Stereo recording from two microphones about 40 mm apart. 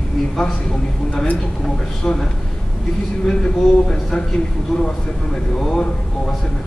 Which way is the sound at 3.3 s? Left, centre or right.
Centre.